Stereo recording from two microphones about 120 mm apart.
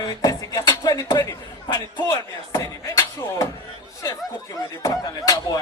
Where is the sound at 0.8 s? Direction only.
30° left (ahead or behind).